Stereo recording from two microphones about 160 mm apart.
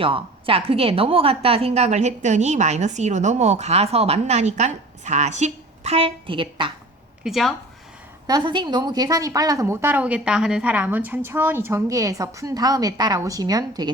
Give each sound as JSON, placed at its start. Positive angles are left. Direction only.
{"t": 0.0, "sound": "a woman's voice", "side_deg": -35}
{"t": 7.3, "sound": "speech", "side_deg": 0}
{"t": 8.3, "sound": "a woman's voice", "side_deg": -30}